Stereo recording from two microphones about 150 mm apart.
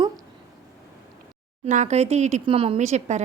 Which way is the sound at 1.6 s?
50° right (ahead or behind).